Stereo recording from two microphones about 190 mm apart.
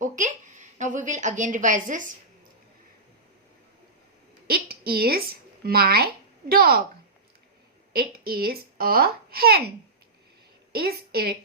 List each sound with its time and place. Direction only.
0.0 s a woman's voice: 40° right (ahead or behind)
4.4 s a woman's voice: 55° right (ahead or behind)
7.9 s a woman's voice: 55° right (ahead or behind)